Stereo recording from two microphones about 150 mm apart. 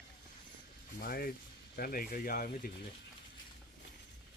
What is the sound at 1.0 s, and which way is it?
Speech, 85° left.